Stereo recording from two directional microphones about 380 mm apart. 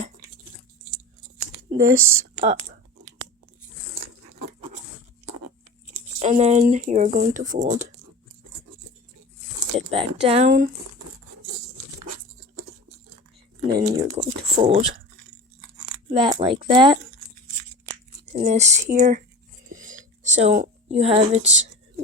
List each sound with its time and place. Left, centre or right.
2.3 s speech: centre
6.1 s speech: centre
9.7 s speech: centre
13.6 s speech: centre
16.1 s speech: centre
18.3 s speech: centre
19.7 s a sound: right